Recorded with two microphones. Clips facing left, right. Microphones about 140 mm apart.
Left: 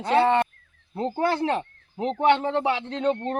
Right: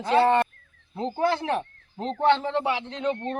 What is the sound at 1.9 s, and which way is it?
Speech, 15° left (ahead or behind).